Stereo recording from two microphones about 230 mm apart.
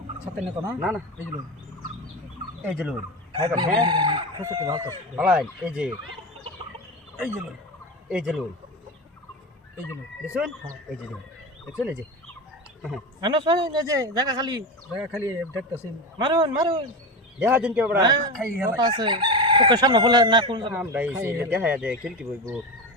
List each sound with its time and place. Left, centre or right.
0.3 s speech: centre
2.6 s speech: centre
3.3 s chicken: centre
5.1 s speech: centre
8.1 s speech: centre
13.2 s speech: centre
14.9 s speech: centre
16.1 s chicken: centre
17.4 s speech: centre
18.0 s speech: centre
18.5 s chicken: centre
20.7 s speech: centre